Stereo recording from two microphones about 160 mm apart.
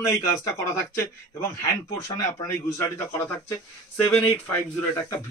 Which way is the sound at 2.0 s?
20° left (ahead or behind).